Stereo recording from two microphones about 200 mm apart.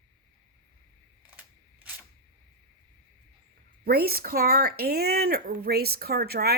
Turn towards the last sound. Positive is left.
turn(degrees=-50)  # may be behind; listen again after turning